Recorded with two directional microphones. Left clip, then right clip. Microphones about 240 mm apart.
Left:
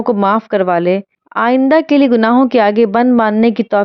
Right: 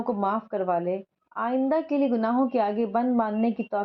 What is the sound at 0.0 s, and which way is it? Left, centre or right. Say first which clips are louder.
A woman's voice: left 14 dB; left.